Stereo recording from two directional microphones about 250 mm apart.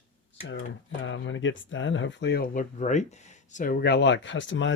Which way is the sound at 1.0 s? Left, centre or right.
Left.